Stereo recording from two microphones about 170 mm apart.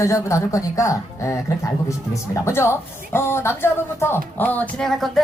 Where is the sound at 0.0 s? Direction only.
20° left (ahead or behind).